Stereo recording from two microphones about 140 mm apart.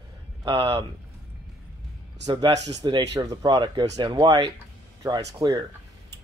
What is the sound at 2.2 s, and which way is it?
Speech, 25° right (ahead or behind).